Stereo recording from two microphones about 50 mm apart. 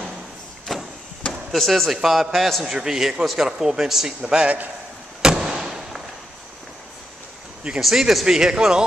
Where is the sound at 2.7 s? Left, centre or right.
Centre.